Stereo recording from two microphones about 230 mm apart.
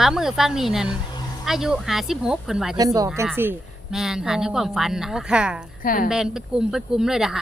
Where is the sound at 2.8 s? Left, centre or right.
Centre.